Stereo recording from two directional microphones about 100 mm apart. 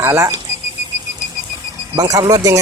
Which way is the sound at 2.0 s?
35° right (ahead or behind).